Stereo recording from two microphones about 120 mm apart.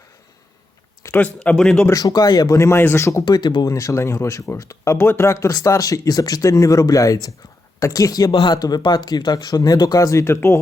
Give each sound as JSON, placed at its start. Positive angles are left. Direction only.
{"t": 1.0, "sound": "speech", "side_deg": 15}
{"t": 1.9, "sound": "speech", "side_deg": 30}